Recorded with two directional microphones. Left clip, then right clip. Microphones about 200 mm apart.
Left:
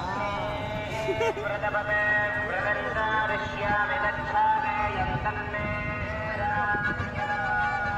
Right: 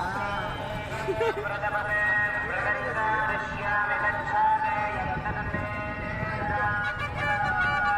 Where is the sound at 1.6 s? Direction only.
35° right (ahead or behind).